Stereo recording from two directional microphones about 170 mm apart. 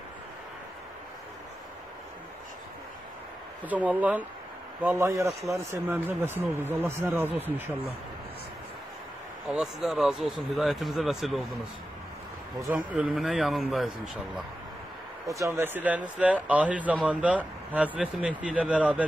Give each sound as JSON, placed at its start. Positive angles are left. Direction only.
{"t": 3.6, "sound": "speech", "side_deg": -10}
{"t": 9.5, "sound": "speech", "side_deg": 0}
{"t": 12.7, "sound": "speech", "side_deg": -5}
{"t": 15.2, "sound": "speech", "side_deg": -20}